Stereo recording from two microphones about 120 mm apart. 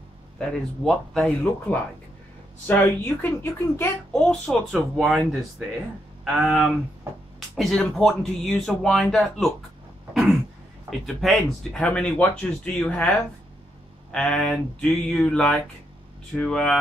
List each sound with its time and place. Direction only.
0.4 s speech: 5° left (ahead or behind); by 3.9 s 20° left (ahead or behind)
4.1 s speech: 5° left (ahead or behind)
11.1 s speech: centre (ahead or behind)
14.1 s speech: 10° left (ahead or behind)